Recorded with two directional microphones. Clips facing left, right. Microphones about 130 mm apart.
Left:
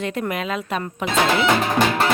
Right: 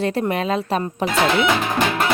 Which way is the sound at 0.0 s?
35° right (ahead or behind).